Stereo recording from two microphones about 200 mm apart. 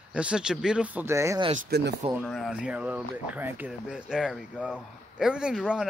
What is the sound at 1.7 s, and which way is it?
Speech, 55° right (ahead or behind).